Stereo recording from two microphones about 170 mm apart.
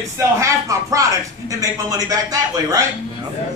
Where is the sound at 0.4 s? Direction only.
20° right (ahead or behind).